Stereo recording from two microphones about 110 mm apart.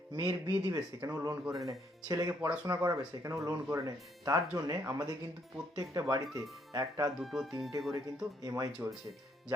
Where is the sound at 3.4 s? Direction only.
30° right (ahead or behind).